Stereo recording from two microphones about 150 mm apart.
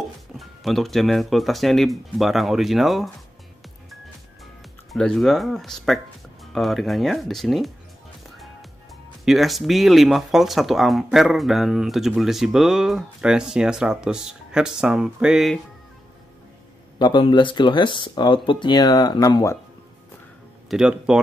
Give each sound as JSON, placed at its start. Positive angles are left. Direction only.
{"t": 0.4, "sound": "speech", "side_deg": 0}
{"t": 4.9, "sound": "speech", "side_deg": 5}
{"t": 9.2, "sound": "speech", "side_deg": 0}
{"t": 17.0, "sound": "speech", "side_deg": 30}
{"t": 20.7, "sound": "speech", "side_deg": -5}